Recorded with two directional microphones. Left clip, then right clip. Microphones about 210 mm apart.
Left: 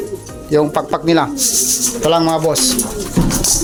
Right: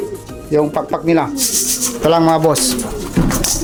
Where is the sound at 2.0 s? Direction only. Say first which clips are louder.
Right 2 dB; 15° right (ahead or behind).